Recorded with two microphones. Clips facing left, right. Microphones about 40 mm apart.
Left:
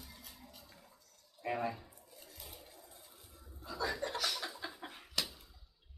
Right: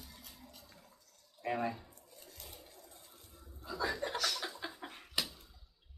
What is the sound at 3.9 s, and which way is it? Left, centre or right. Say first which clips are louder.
Chuckle: right 1 dB; centre.